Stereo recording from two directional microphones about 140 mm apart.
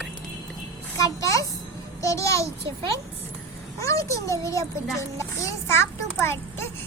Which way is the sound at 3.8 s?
20° left (ahead or behind).